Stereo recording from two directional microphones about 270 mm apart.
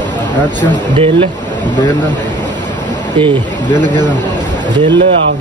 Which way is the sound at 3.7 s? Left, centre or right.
Right.